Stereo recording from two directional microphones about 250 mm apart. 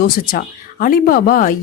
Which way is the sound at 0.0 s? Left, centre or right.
Left.